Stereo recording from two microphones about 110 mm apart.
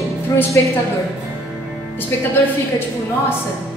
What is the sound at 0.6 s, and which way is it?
Speech, 20° left (ahead or behind).